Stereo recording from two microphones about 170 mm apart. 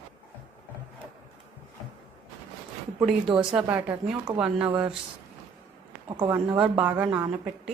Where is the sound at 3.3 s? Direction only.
5° right (ahead or behind).